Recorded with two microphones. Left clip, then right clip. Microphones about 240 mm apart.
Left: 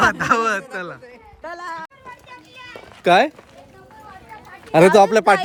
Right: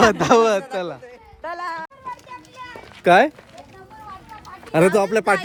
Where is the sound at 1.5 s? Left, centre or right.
Right.